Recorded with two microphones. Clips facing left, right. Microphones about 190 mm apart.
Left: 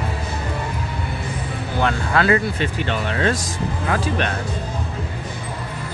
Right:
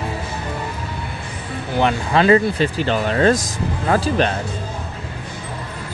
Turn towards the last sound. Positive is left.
turn(degrees=-35)  # may be behind; listen again after turning